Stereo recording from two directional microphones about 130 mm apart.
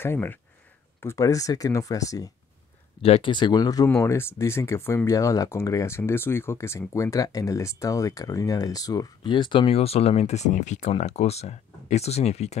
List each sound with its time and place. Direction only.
0.0 s speech: 15° left (ahead or behind)
3.0 s speech: 45° left (ahead or behind)